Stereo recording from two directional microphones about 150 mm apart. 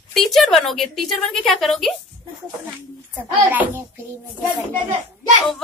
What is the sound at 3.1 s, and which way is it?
Speech, 10° right (ahead or behind).